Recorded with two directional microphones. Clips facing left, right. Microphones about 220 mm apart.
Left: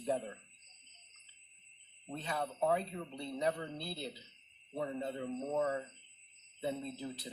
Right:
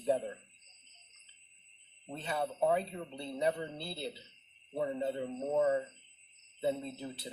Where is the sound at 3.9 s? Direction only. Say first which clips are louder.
Right 2 dB; 30° right (ahead or behind).